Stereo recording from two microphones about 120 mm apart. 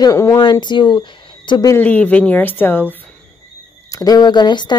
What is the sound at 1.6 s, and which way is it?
Speech, 15° left (ahead or behind).